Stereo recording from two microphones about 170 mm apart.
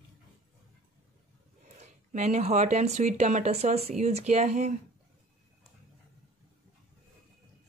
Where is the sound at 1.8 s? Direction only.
40° right (ahead or behind).